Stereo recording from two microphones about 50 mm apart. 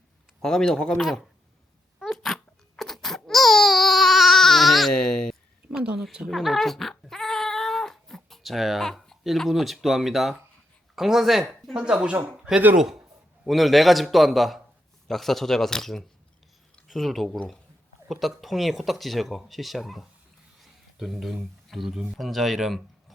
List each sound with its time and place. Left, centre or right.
0.4 s speech: centre
1.0 s speech: centre
2.0 s a sound: centre
5.0 s a sound: centre
6.0 s a woman's voice: centre
6.2 s cat: centre
9.4 s speech: centre
11.7 s speech: centre
12.7 s speech: centre
20.6 s a sound: centre
21.7 s speech: centre